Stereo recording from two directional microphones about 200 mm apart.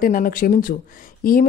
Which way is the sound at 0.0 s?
45° left (ahead or behind).